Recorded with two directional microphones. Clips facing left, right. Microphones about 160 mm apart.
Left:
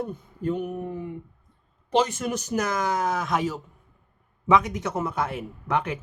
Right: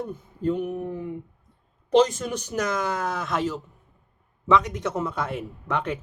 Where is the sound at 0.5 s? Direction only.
Centre (ahead or behind).